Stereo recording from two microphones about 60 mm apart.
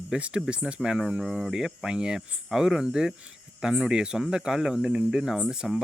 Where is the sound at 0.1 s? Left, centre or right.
Centre.